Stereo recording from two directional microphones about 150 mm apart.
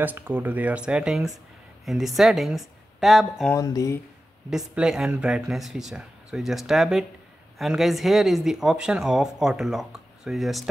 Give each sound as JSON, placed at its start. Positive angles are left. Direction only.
{"t": 0.0, "sound": "speech", "side_deg": -15}
{"t": 3.5, "sound": "speech", "side_deg": 25}
{"t": 4.5, "sound": "speech", "side_deg": -5}